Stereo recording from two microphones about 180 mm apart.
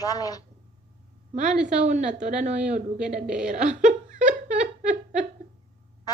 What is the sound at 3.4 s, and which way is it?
Giggle, 45° right (ahead or behind).